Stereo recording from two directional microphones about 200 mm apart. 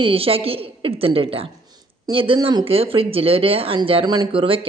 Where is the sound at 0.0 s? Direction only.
30° right (ahead or behind).